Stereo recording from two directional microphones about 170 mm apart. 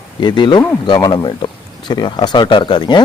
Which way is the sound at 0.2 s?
25° left (ahead or behind).